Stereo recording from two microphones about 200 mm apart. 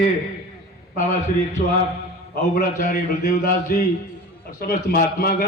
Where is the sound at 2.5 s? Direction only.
40° left (ahead or behind).